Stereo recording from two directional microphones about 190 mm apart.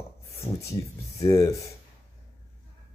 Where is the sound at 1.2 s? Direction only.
15° left (ahead or behind).